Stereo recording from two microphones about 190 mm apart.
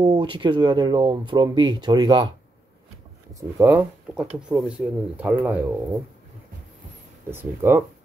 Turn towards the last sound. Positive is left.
turn(degrees=-10)  # may be behind; listen again after turning